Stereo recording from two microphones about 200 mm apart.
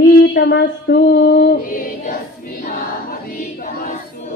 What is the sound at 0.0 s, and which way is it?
Female singing, 50° left (ahead or behind).